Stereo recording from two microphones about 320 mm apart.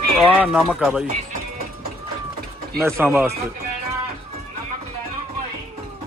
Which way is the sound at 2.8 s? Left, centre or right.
Centre.